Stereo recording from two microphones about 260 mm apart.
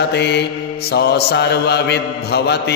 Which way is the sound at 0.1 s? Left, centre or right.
Left.